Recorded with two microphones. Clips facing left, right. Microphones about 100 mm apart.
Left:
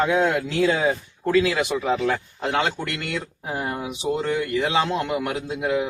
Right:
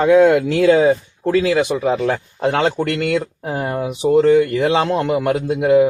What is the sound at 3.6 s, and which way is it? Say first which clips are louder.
Speech: right 8 dB; 45° right (ahead or behind).